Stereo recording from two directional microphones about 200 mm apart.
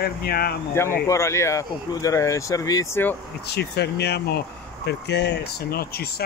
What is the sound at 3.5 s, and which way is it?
Speech, 55° left (ahead or behind).